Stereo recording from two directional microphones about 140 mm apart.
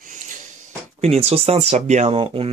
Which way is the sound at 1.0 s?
45° right (ahead or behind).